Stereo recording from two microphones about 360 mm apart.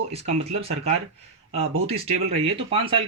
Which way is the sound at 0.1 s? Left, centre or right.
Centre.